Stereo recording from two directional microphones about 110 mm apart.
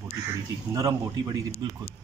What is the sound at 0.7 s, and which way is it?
Speech, 35° right (ahead or behind).